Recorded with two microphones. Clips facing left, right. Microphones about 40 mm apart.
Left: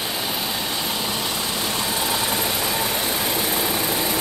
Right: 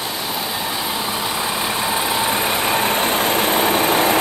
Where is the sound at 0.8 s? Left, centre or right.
Centre.